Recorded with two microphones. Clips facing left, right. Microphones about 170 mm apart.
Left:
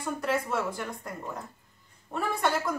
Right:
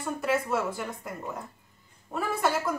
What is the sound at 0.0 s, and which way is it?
A woman's voice, 5° right (ahead or behind).